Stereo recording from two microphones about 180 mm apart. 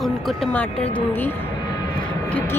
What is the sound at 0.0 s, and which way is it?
Speech, centre (ahead or behind).